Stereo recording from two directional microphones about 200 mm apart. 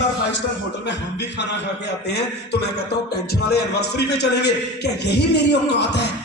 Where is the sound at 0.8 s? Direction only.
60° left (ahead or behind).